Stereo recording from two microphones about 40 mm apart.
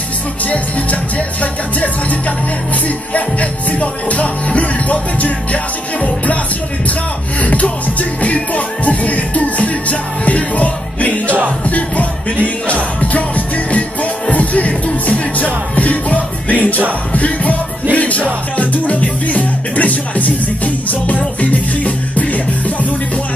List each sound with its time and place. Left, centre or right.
1.1 s music: left
7.4 s music: left
14.3 s music: left